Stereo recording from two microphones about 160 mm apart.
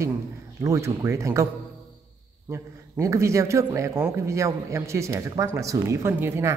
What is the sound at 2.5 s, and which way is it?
Speech, 20° right (ahead or behind).